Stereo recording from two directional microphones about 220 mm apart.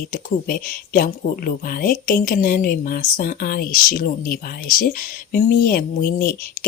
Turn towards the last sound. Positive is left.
turn(degrees=40)  # may be behind; listen again after turning